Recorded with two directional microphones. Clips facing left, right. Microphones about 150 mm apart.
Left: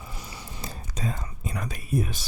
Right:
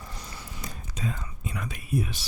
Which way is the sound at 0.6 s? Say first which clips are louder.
Left 1 dB; 35° left (ahead or behind).